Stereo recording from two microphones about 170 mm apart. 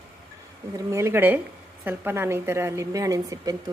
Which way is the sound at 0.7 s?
15° right (ahead or behind).